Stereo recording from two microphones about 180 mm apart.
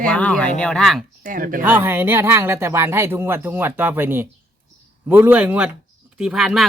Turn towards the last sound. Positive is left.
turn(degrees=0)  # may be behind; listen again after turning